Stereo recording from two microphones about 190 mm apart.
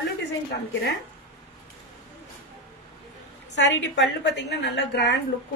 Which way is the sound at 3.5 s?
70° left (ahead or behind).